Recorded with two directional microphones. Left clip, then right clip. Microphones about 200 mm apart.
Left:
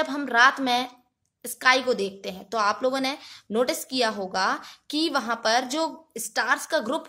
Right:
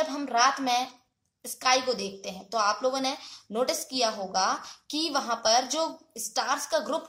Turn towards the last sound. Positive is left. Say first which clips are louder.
# left 3 dB
turn(degrees=45)  # may be behind; listen again after turning